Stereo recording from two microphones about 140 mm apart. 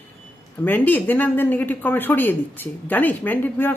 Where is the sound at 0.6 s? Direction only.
15° left (ahead or behind).